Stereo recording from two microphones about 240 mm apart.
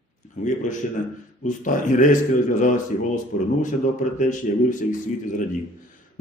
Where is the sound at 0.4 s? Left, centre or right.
Left.